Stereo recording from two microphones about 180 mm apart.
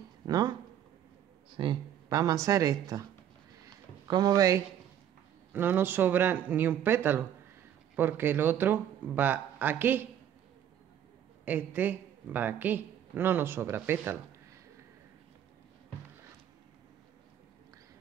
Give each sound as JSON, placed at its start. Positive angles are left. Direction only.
{"t": 0.3, "sound": "speech", "side_deg": -20}
{"t": 1.6, "sound": "speech", "side_deg": -25}
{"t": 3.6, "sound": "a sound", "side_deg": -20}
{"t": 5.5, "sound": "a woman's voice", "side_deg": -10}
{"t": 11.4, "sound": "a woman's voice", "side_deg": -10}